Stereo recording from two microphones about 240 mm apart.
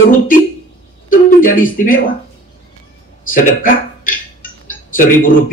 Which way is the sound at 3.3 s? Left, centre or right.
Left.